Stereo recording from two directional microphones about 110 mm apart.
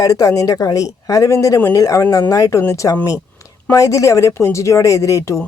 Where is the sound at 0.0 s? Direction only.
30° left (ahead or behind).